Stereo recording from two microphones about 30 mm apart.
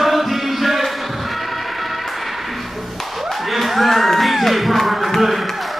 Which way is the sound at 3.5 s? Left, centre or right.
Centre.